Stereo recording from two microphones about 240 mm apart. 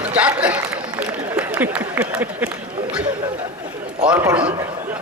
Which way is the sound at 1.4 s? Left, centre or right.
Centre.